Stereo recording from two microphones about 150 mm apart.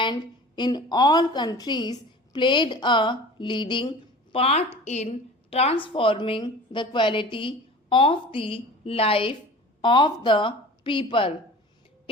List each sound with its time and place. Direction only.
0.0 s a woman's voice: 30° left (ahead or behind)